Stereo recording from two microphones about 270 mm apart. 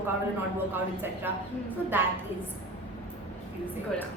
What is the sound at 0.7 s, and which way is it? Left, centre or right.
A woman's voice, centre.